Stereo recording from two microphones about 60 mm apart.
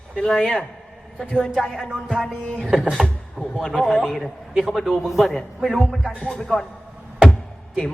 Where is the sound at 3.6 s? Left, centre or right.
Centre.